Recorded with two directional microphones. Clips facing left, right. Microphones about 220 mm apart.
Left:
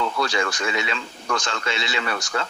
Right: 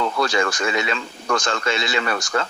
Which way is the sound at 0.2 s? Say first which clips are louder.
Right 3 dB; 45° right (ahead or behind).